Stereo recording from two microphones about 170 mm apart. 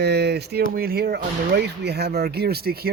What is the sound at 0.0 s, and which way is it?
Speech, 75° right (ahead or behind).